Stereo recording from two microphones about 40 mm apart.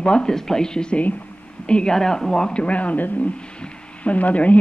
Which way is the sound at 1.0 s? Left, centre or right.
Left.